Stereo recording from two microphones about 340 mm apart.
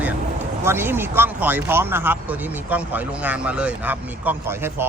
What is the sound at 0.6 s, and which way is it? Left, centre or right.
Speech, centre.